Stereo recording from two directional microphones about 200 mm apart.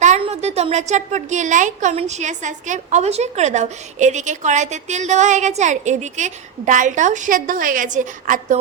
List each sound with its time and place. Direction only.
0.0 s a woman's voice: 35° right (ahead or behind)